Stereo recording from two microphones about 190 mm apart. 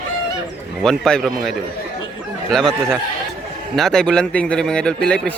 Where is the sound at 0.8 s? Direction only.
5° left (ahead or behind).